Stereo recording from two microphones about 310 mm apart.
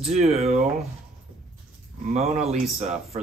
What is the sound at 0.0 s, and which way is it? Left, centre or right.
Speech, right.